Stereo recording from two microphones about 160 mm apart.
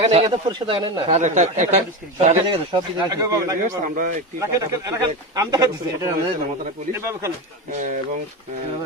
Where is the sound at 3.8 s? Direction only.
55° right (ahead or behind).